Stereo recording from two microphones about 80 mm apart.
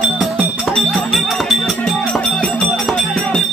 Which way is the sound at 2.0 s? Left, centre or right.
Centre.